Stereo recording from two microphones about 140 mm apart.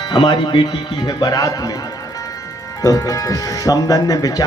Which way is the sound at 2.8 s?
25° left (ahead or behind).